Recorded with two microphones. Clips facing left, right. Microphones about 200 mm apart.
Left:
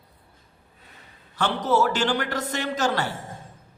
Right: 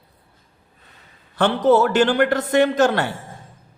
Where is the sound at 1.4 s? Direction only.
55° right (ahead or behind).